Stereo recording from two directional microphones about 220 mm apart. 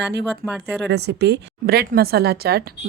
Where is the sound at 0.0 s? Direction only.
50° right (ahead or behind).